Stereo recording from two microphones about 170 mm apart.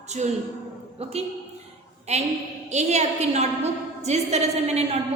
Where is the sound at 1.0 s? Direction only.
35° right (ahead or behind).